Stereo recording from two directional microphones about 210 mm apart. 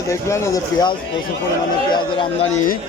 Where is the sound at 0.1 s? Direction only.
15° left (ahead or behind).